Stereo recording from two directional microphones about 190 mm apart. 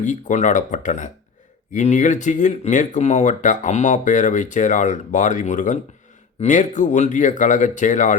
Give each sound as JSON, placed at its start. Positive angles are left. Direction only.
{"t": 0.0, "sound": "speech", "side_deg": 40}